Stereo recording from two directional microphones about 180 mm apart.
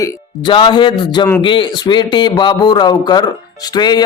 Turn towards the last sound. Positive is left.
turn(degrees=25)  # may be behind; listen again after turning